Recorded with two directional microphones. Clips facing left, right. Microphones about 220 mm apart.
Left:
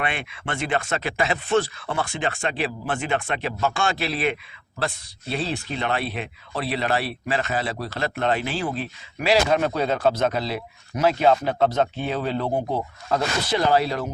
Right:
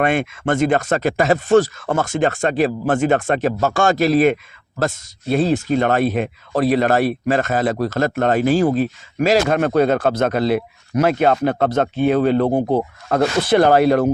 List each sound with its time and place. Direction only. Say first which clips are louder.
0.0 s speech: right 11 dB; 45° right (ahead or behind)